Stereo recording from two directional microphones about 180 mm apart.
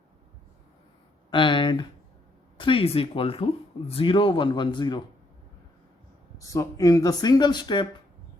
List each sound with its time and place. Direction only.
1.3 s speech: 25° left (ahead or behind)
6.5 s speech: 20° left (ahead or behind)